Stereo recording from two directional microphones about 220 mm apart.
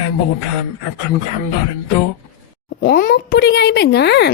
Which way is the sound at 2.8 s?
40° left (ahead or behind).